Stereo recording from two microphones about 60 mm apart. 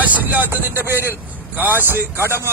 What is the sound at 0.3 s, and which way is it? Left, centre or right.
Speech, right.